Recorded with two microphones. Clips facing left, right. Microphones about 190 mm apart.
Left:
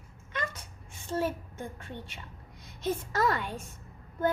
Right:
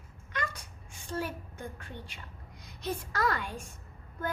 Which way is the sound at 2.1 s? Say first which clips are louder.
Left 2 dB; 25° left (ahead or behind).